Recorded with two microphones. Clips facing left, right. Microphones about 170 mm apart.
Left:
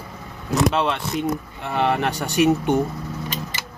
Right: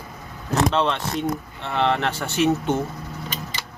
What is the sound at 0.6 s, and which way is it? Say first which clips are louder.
A man's voice: even; 10° left (ahead or behind).